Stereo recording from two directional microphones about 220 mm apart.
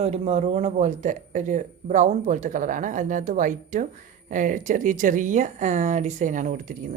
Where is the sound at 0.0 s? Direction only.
30° right (ahead or behind).